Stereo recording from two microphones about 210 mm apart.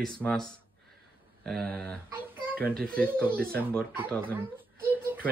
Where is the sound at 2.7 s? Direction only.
45° right (ahead or behind).